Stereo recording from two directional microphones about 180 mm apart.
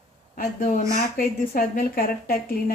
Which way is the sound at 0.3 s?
50° left (ahead or behind).